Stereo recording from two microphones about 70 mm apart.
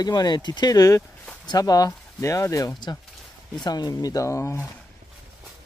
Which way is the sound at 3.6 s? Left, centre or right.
Left.